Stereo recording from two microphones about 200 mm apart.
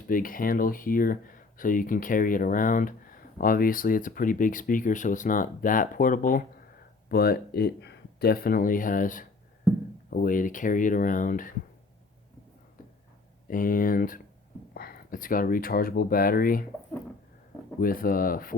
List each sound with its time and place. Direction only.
0.1 s speech: 45° left (ahead or behind)
13.5 s speech: 45° left (ahead or behind)
17.7 s speech: 45° left (ahead or behind)